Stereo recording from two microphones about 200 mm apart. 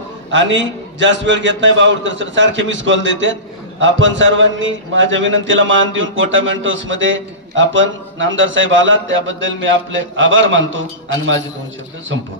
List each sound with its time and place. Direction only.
0.3 s a man's voice: 65° right (ahead or behind)